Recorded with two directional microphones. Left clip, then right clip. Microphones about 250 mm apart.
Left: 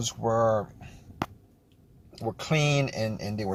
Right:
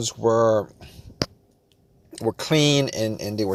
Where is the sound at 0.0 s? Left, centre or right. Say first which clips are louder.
Right 6 dB; right.